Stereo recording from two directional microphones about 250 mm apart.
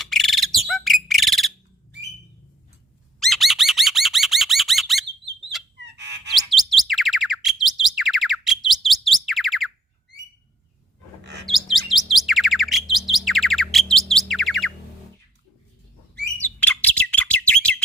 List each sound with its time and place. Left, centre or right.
0.0 s bird: centre
3.2 s squawk: centre
5.8 s chirp: right
6.3 s chirp: centre
11.4 s bird: centre
16.4 s bird: centre